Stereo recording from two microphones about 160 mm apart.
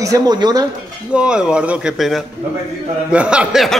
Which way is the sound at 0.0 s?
20° right (ahead or behind).